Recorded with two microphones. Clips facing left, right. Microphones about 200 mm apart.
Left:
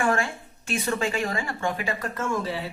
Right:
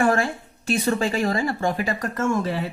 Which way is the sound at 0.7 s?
35° right (ahead or behind).